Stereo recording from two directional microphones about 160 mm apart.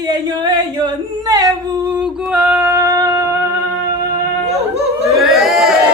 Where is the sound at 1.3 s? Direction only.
20° right (ahead or behind).